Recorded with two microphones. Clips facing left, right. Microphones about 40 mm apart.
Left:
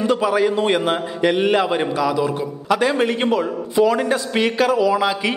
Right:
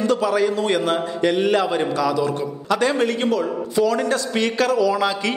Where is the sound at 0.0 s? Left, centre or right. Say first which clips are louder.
Left 1 dB; centre.